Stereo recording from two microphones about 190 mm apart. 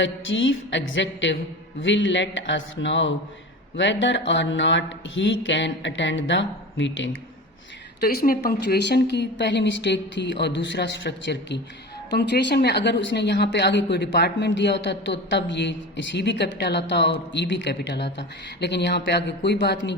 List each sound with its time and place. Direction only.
0.0 s a sound: 80° left
1.8 s speech: 75° left (ahead or behind)
8.0 s a woman's voice: 50° left (ahead or behind)